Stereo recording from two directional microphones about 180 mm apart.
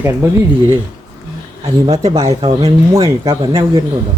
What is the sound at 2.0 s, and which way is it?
Speech, 20° right (ahead or behind).